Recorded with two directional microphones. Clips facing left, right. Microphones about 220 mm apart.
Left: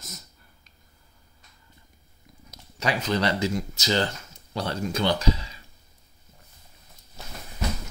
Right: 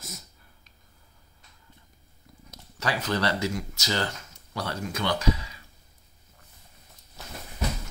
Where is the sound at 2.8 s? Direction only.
20° left (ahead or behind).